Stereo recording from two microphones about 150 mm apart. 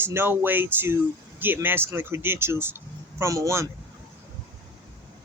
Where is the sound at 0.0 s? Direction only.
15° right (ahead or behind).